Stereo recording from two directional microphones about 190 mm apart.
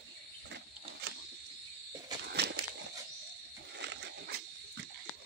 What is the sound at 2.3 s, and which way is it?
Horse, 60° right (ahead or behind).